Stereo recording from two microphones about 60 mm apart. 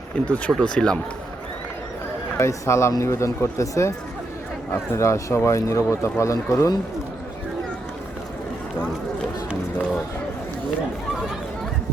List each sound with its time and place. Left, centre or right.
0.1 s speech: left
2.4 s speech: left